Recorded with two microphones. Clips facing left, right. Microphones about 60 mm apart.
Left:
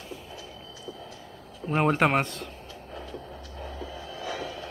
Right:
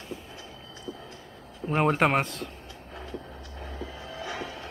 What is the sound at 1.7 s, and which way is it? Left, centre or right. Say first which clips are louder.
Speech: even; centre.